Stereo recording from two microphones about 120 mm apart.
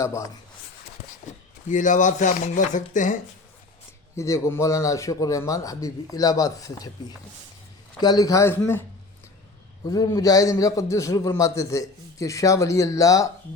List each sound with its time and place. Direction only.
0.0 s a man's voice: 25° left (ahead or behind)
1.6 s speech: 90° left
4.1 s a man's voice: 25° left (ahead or behind)
8.0 s a man's voice: 30° left (ahead or behind)
9.8 s a man's voice: 30° left (ahead or behind)